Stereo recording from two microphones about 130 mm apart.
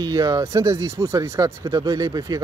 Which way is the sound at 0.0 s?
30° right (ahead or behind).